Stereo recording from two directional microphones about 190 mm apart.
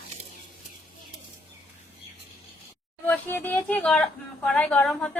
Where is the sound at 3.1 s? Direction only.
10° left (ahead or behind).